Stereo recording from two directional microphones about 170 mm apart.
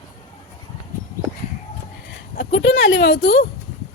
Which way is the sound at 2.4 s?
90° left.